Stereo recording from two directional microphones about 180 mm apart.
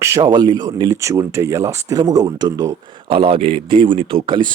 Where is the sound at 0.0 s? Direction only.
20° right (ahead or behind).